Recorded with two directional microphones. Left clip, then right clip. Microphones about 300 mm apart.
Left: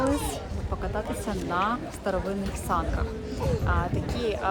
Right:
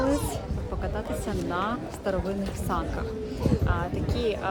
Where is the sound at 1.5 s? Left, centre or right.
Centre.